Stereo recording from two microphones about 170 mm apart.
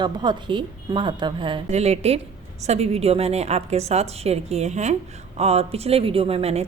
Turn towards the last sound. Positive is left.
turn(degrees=-35)  # may be behind; listen again after turning